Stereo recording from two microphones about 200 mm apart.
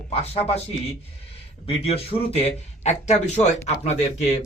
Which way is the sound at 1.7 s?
30° left (ahead or behind).